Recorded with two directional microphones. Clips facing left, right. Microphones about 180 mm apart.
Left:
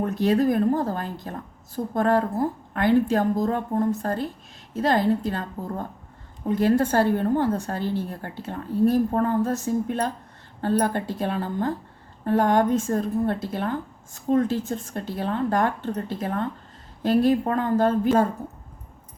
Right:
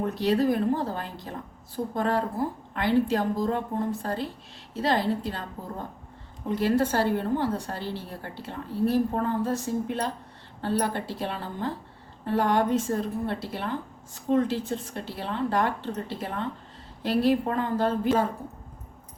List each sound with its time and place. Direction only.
0.0 s a woman's voice: 50° left (ahead or behind)
6.5 s a woman's voice: 50° left (ahead or behind)